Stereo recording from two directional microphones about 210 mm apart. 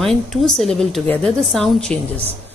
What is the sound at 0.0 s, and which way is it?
Speech, centre (ahead or behind).